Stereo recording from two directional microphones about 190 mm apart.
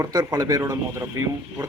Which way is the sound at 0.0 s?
20° right (ahead or behind).